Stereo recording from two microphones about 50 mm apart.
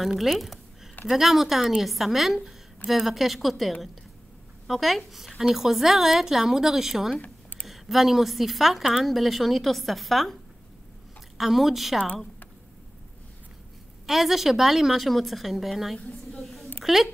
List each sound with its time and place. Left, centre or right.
0.0 s a woman's voice: centre
7.2 s a sound: left
7.6 s a woman's voice: centre
11.3 s a woman's voice: centre
14.0 s a woman's voice: centre